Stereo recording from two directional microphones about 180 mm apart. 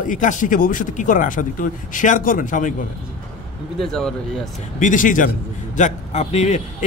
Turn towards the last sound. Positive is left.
turn(degrees=40)  # may be behind; listen again after turning